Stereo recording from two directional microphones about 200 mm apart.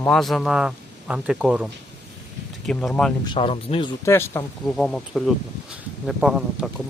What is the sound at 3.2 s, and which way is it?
Speech, 25° left (ahead or behind).